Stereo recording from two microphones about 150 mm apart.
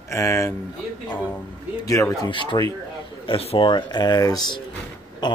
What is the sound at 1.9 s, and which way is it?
Speech, 20° left (ahead or behind).